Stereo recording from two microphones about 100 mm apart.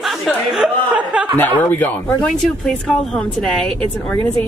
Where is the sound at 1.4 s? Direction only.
20° left (ahead or behind).